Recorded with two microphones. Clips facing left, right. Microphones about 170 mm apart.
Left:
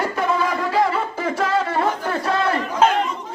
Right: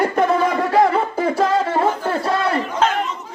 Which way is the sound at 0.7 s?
50° right (ahead or behind).